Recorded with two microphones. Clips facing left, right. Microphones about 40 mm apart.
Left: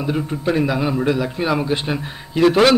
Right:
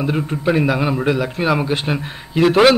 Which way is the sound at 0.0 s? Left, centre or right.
Centre.